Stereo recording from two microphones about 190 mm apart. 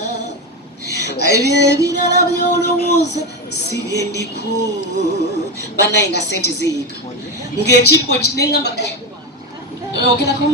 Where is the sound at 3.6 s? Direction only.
60° left (ahead or behind).